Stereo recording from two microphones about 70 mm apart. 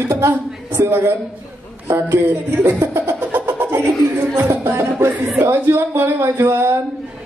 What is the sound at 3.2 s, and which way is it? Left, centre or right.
Music, right.